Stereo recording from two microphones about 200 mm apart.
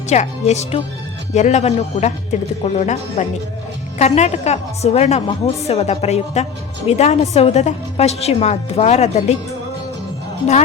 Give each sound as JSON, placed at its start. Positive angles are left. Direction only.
{"t": 0.1, "sound": "a woman's voice", "side_deg": 35}